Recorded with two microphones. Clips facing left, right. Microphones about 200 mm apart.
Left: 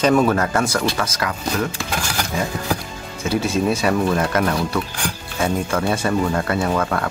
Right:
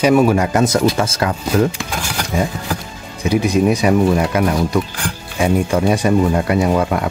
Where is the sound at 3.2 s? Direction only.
15° right (ahead or behind).